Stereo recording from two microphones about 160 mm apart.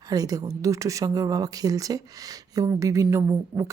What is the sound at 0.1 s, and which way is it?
Speech, 20° right (ahead or behind).